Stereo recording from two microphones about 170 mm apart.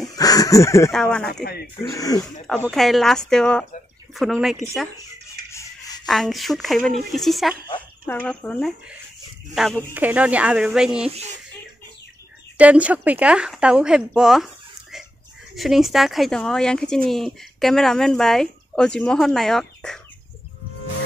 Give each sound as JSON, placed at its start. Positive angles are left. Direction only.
{"t": 0.1, "sound": "speech", "side_deg": 20}
{"t": 0.9, "sound": "speech", "side_deg": 5}
{"t": 1.3, "sound": "speech", "side_deg": 70}
{"t": 1.8, "sound": "speech", "side_deg": 20}
{"t": 2.4, "sound": "speech", "side_deg": 5}
{"t": 5.5, "sound": "a sound", "side_deg": 15}
{"t": 6.0, "sound": "speech", "side_deg": 0}
{"t": 7.6, "sound": "a sound", "side_deg": 25}
{"t": 8.1, "sound": "speech", "side_deg": 10}
{"t": 12.5, "sound": "a woman's voice", "side_deg": -10}